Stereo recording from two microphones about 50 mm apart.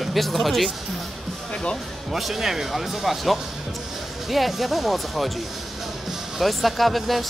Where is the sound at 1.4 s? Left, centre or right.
Centre.